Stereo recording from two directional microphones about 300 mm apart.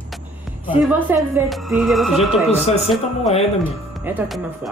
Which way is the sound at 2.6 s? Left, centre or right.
Centre.